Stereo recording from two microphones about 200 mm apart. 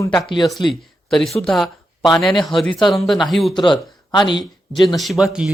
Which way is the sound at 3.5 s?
25° left (ahead or behind).